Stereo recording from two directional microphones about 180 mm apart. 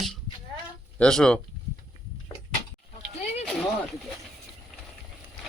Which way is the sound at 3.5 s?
Centre (ahead or behind).